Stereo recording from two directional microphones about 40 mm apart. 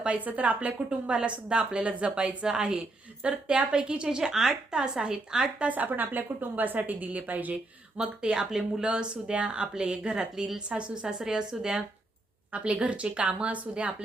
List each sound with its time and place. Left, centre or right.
0.3 s a woman's voice: right
2.5 s a woman's voice: centre
4.2 s a woman's voice: centre
5.5 s a woman's voice: right
7.9 s a woman's voice: right
12.5 s a woman's voice: right